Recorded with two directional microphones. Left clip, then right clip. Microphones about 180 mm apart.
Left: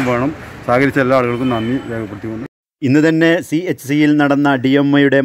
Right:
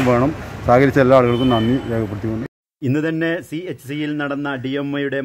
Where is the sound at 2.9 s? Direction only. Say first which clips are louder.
Left 8 dB; 40° left (ahead or behind).